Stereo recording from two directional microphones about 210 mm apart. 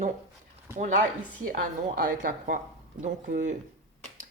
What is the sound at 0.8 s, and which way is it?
Speech, 35° right (ahead or behind).